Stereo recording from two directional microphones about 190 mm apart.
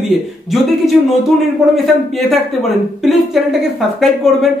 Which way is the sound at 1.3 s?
Centre (ahead or behind).